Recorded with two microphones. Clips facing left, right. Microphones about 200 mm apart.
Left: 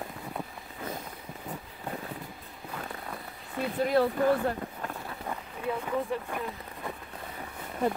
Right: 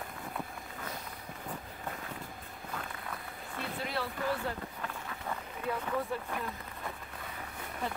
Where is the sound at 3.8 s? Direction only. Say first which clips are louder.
Left 13 dB; 45° left (ahead or behind).